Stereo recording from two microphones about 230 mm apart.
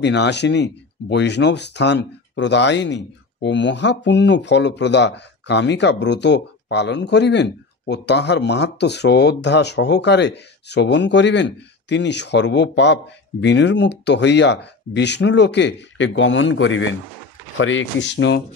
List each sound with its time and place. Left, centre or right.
0.0 s speech: left